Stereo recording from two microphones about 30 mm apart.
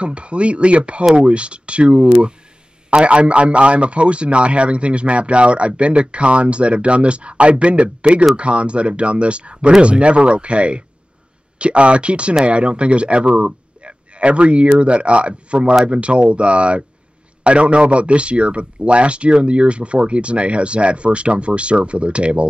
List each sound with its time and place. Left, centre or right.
0.0 s a man's voice: right